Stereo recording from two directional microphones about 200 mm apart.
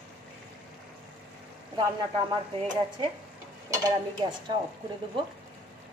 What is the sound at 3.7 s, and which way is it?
Stir, 20° right (ahead or behind).